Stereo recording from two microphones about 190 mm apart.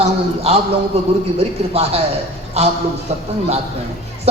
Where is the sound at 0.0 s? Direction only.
30° right (ahead or behind).